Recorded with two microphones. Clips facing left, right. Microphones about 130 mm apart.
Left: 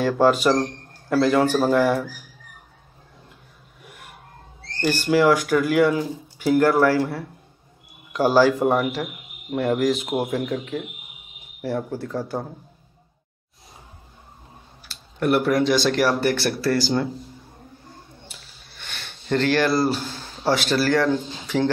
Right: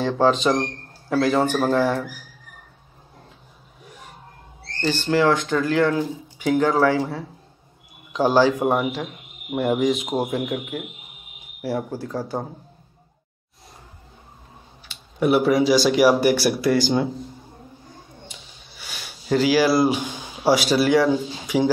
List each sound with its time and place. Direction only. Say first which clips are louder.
0.0 s speech: left 1 dB; 5° left (ahead or behind)
3.8 s a sound: right 1 dB; 5° left (ahead or behind)
4.7 s speech: left 1 dB; 10° left (ahead or behind)
8.1 s speech: even; 5° left (ahead or behind)
8.5 s speech: left 1 dB; 5° right (ahead or behind)
9.5 s speech: even; 10° right (ahead or behind)
9.8 s speech: even; centre (ahead or behind)
15.1 s speech: right 2 dB; 5° right (ahead or behind)
18.3 s a sound: right 2 dB; 5° right (ahead or behind)